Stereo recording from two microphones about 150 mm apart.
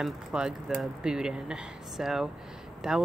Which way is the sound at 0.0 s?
5° right (ahead or behind).